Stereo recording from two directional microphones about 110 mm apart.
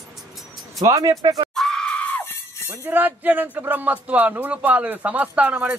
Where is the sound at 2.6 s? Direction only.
20° right (ahead or behind).